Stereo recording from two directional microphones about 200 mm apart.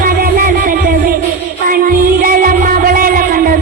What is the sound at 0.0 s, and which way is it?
Music, 45° right (ahead or behind).